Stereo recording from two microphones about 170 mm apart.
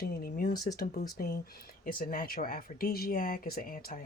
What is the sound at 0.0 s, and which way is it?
Speech, 60° left (ahead or behind).